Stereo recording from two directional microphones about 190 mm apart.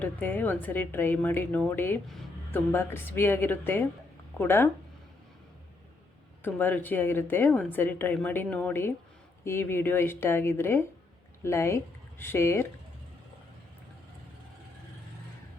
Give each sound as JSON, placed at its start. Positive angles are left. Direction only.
{"t": 0.0, "sound": "speech", "side_deg": 10}
{"t": 6.4, "sound": "speech", "side_deg": 10}